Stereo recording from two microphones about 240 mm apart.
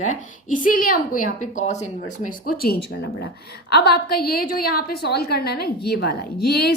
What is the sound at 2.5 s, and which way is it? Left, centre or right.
A woman's voice, left.